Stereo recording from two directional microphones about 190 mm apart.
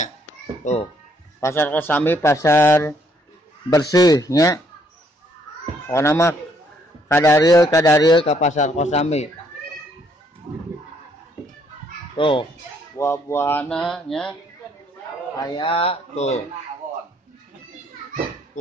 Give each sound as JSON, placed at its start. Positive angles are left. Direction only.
{"t": 0.7, "sound": "a man's voice", "side_deg": 40}
{"t": 1.4, "sound": "a man's voice", "side_deg": 10}
{"t": 5.9, "sound": "a man's voice", "side_deg": 15}
{"t": 8.3, "sound": "a man's voice", "side_deg": 40}
{"t": 10.5, "sound": "a sound", "side_deg": -20}
{"t": 12.2, "sound": "speech", "side_deg": 25}
{"t": 12.9, "sound": "a man's voice", "side_deg": 15}
{"t": 15.3, "sound": "a man's voice", "side_deg": 20}